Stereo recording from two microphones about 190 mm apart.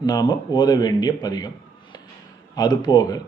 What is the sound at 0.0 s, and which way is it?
Speech, 20° left (ahead or behind).